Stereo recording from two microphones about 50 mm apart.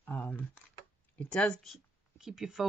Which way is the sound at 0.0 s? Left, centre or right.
Left.